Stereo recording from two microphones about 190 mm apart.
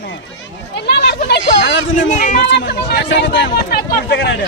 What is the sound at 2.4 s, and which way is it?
Speech, 70° left (ahead or behind).